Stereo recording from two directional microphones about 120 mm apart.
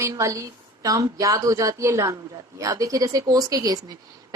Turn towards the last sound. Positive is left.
turn(degrees=-30)  # may be behind; listen again after turning